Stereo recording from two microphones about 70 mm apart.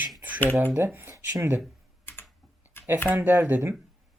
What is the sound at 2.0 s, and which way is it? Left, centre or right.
Typing, left.